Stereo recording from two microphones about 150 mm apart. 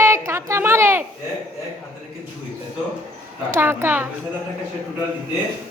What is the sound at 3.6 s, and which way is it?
Speech, 15° right (ahead or behind).